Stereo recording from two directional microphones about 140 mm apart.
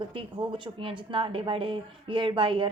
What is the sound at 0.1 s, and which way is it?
Speech, 40° right (ahead or behind).